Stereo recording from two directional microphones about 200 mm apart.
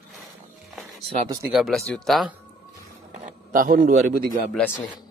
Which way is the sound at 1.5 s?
Centre (ahead or behind).